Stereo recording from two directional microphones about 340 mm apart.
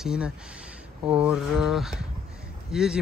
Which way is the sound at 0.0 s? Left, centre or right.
Centre.